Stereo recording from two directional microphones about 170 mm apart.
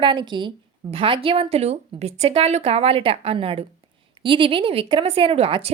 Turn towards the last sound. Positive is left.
turn(degrees=-35)  # may be behind; listen again after turning